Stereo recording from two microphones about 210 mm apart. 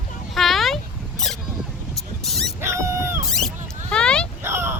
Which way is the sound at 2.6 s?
15° right (ahead or behind).